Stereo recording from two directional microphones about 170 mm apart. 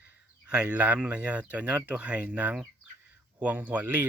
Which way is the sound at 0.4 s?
5° right (ahead or behind).